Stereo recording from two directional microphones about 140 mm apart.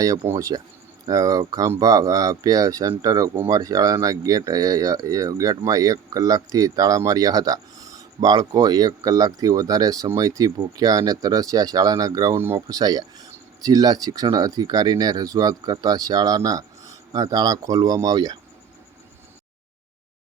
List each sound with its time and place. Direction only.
0.0 s speech: 25° right (ahead or behind)